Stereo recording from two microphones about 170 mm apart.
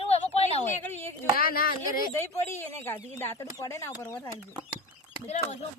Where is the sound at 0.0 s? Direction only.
35° left (ahead or behind).